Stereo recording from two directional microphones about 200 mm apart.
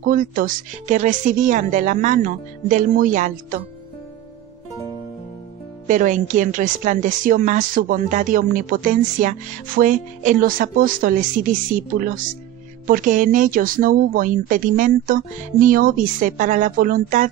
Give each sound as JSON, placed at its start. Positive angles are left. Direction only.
{"t": 0.1, "sound": "speech", "side_deg": -45}
{"t": 5.9, "sound": "speech", "side_deg": -40}